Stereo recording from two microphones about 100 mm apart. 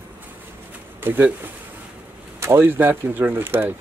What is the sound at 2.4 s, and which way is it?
Speech, 25° right (ahead or behind).